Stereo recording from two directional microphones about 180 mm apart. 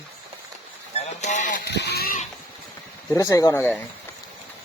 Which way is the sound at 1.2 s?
45° left (ahead or behind).